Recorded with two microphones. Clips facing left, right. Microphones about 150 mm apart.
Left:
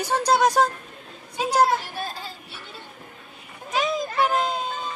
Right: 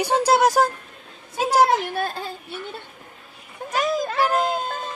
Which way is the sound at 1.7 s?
60° right (ahead or behind).